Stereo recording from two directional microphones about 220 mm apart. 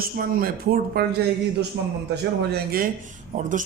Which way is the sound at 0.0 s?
40° right (ahead or behind).